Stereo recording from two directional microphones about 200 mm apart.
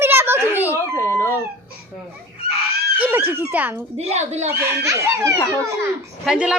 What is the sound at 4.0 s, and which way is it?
Speech, 30° right (ahead or behind).